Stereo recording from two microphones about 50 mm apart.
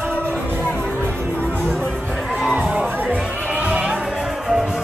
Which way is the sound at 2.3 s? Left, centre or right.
Right.